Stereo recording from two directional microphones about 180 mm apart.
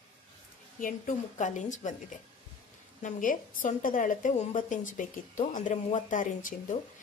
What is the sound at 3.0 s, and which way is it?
A woman's voice, 50° left (ahead or behind).